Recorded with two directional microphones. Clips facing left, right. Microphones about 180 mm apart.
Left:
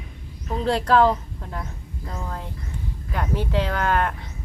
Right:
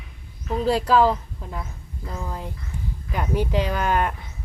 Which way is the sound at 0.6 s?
5° right (ahead or behind).